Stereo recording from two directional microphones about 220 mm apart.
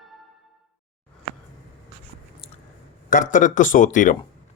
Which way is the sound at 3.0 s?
35° left (ahead or behind).